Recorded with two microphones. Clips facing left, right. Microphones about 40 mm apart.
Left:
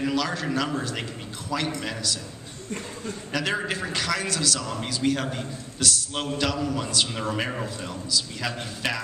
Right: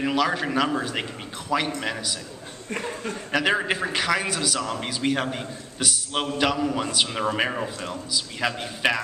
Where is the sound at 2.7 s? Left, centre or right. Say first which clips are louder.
Right 4 dB; right.